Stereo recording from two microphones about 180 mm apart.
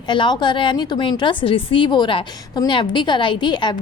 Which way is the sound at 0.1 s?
25° left (ahead or behind).